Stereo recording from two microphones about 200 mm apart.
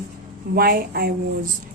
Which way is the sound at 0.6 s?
50° right (ahead or behind).